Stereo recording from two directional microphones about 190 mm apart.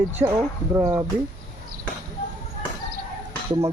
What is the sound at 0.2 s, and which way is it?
Speech, 25° right (ahead or behind).